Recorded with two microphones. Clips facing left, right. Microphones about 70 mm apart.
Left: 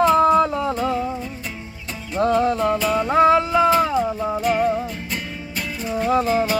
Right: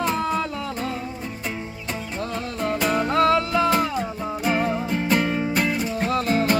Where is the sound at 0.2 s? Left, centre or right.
Left.